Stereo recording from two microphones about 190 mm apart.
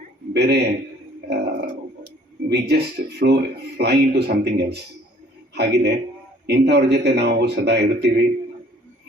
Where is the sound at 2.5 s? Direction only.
60° right (ahead or behind).